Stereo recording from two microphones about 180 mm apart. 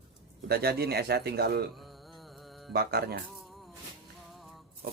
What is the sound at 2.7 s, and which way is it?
Speech, 60° right (ahead or behind).